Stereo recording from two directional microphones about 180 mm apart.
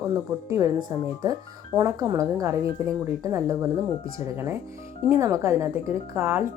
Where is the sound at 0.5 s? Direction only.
20° right (ahead or behind).